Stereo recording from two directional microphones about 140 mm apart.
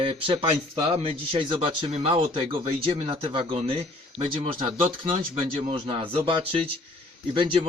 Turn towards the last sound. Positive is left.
turn(degrees=-40)  # may be behind; listen again after turning